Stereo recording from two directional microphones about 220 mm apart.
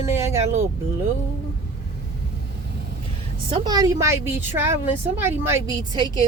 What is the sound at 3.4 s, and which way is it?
A woman's voice, 20° right (ahead or behind).